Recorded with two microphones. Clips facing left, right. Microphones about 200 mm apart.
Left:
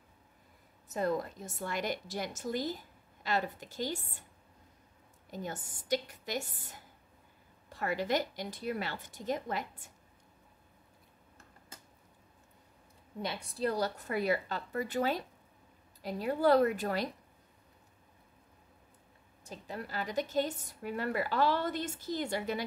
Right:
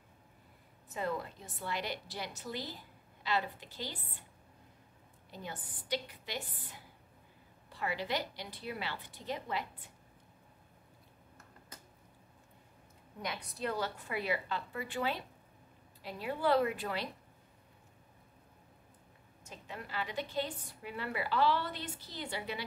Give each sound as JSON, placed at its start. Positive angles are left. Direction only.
{"t": 0.8, "sound": "a woman's voice", "side_deg": 40}
{"t": 5.3, "sound": "a woman's voice", "side_deg": 45}
{"t": 13.2, "sound": "a woman's voice", "side_deg": 30}
{"t": 19.4, "sound": "a woman's voice", "side_deg": 35}